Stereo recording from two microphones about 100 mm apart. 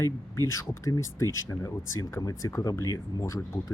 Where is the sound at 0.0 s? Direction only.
30° left (ahead or behind).